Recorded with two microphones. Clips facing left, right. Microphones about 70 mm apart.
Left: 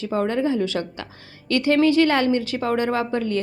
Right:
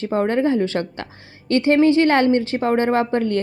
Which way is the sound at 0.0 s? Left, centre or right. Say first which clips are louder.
Right 3 dB; right.